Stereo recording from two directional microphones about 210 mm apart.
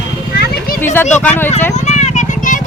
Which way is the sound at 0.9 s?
10° left (ahead or behind).